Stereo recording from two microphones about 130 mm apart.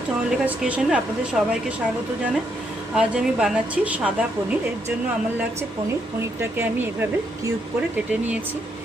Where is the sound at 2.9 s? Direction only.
5° right (ahead or behind).